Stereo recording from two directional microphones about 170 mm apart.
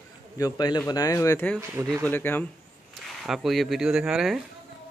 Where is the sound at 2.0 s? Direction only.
10° left (ahead or behind).